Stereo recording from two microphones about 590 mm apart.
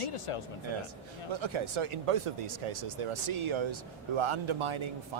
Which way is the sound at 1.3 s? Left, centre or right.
Right.